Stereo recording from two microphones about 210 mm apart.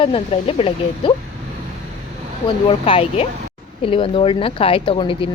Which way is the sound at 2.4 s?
25° left (ahead or behind).